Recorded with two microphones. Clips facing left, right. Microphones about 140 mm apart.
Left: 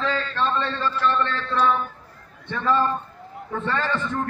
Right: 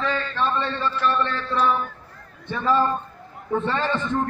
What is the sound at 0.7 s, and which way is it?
A man's voice, 5° right (ahead or behind).